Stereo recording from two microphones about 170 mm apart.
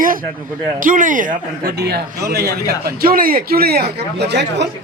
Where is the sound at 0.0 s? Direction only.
55° right (ahead or behind).